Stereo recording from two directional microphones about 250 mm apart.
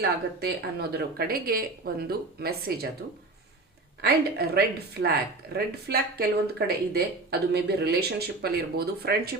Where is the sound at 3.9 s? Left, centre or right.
Right.